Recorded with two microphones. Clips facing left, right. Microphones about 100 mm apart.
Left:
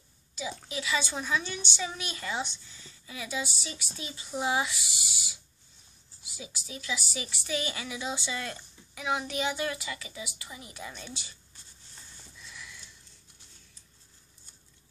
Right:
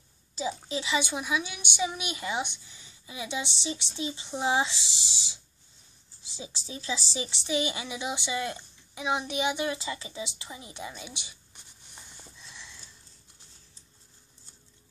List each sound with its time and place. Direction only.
0.7 s a woman's voice: 25° right (ahead or behind)
12.4 s sniff: 30° right (ahead or behind)